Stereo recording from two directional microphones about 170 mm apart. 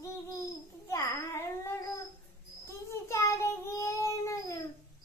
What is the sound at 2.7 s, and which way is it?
Child singing, 15° left (ahead or behind).